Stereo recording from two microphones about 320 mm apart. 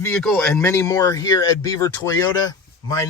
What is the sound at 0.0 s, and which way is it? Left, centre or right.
Speech, centre.